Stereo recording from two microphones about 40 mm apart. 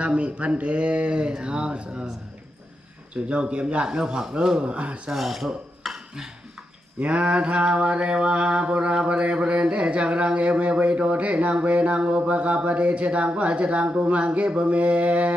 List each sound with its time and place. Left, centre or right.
0.0 s speech: right
3.3 s speech: right
3.9 s speech: centre; by 5.1 s right
5.1 s filing: centre
5.8 s a sound: centre
7.0 s mantra: right